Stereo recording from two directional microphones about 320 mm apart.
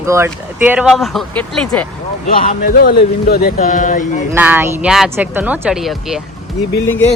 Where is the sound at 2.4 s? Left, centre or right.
Left.